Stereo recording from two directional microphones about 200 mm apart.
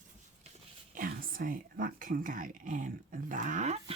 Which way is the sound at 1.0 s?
45° right (ahead or behind).